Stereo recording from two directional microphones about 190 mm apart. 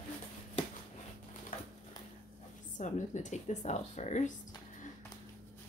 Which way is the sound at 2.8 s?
40° left (ahead or behind).